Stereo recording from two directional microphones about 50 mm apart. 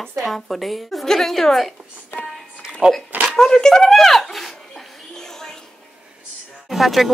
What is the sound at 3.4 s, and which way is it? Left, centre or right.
Speech, centre.